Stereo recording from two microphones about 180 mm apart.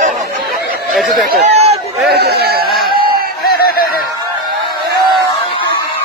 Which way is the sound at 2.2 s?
60° right (ahead or behind).